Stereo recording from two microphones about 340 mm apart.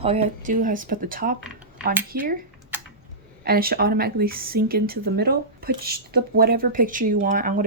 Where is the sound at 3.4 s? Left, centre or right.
Right.